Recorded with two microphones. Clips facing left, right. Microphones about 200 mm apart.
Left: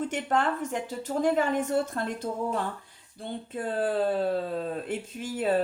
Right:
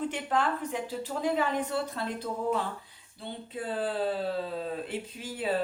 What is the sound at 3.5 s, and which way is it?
Speech, 50° left (ahead or behind).